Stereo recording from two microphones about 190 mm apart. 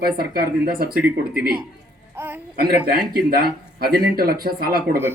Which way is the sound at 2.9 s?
50° right (ahead or behind).